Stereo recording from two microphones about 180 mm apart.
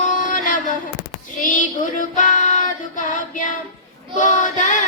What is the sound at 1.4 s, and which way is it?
Child singing, 45° left (ahead or behind).